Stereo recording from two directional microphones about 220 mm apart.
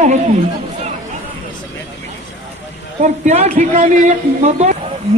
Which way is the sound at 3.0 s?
30° right (ahead or behind).